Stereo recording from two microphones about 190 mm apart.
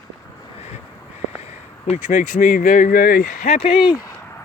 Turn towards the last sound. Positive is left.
turn(degrees=35)  # may be behind; listen again after turning